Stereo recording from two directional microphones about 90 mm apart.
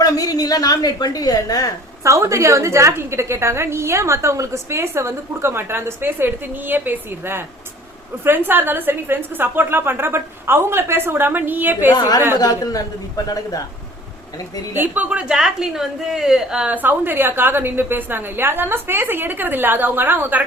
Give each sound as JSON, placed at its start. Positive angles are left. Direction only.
{"t": 0.0, "sound": "a woman's voice", "side_deg": 45}
{"t": 2.0, "sound": "a woman's voice", "side_deg": -35}
{"t": 11.9, "sound": "a woman's voice", "side_deg": 50}
{"t": 14.7, "sound": "a woman's voice", "side_deg": -20}